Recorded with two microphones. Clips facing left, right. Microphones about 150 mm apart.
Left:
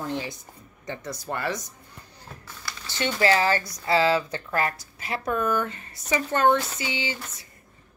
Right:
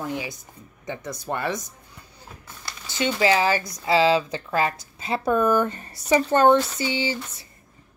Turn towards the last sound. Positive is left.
turn(degrees=-35)  # may be behind; listen again after turning